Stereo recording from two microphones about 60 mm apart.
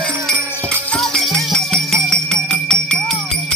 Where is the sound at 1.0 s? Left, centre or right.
Centre.